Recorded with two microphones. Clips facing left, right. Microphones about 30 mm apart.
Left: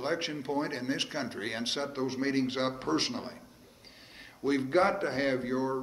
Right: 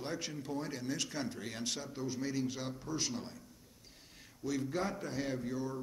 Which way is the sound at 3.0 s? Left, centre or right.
Left.